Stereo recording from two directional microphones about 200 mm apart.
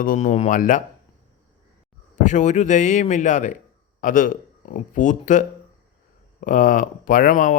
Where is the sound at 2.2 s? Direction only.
35° left (ahead or behind).